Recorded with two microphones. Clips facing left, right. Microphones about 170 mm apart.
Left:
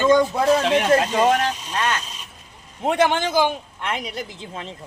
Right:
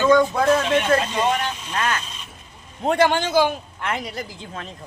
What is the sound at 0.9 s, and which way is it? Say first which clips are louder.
Speech: left 3 dB; 40° left (ahead or behind).